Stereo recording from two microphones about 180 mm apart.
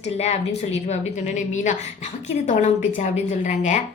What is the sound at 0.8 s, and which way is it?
A woman's voice, 40° left (ahead or behind).